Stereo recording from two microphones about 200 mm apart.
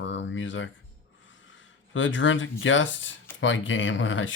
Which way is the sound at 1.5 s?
70° left (ahead or behind).